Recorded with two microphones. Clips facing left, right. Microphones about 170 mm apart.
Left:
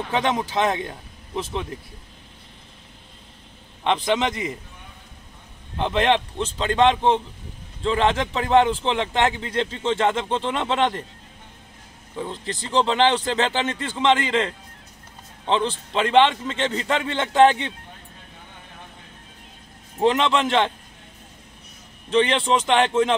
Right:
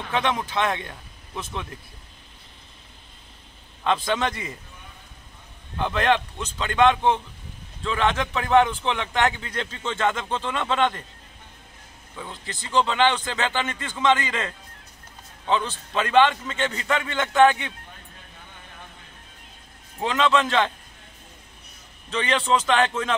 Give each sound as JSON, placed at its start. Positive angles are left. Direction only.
{"t": 0.3, "sound": "a man's voice", "side_deg": 25}
{"t": 0.7, "sound": "speech", "side_deg": 35}
{"t": 3.8, "sound": "a man's voice", "side_deg": 20}
{"t": 5.8, "sound": "a man's voice", "side_deg": 25}
{"t": 12.2, "sound": "a man's voice", "side_deg": 30}
{"t": 20.0, "sound": "a man's voice", "side_deg": 25}
{"t": 22.1, "sound": "a man's voice", "side_deg": 25}